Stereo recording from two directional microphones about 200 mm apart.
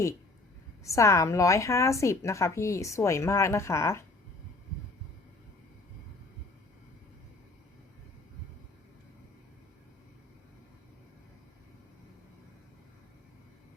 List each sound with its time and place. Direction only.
0.9 s a woman's voice: 15° left (ahead or behind)